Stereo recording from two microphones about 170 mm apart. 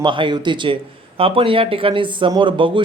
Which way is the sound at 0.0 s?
30° right (ahead or behind).